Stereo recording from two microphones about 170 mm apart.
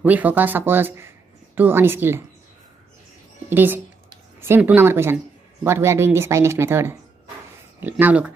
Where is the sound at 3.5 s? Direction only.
10° right (ahead or behind).